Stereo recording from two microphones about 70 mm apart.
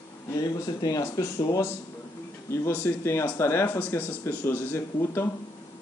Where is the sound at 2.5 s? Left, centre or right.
Left.